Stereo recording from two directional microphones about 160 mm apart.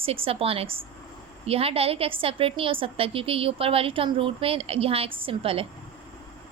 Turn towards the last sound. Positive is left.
turn(degrees=-35)  # may be behind; listen again after turning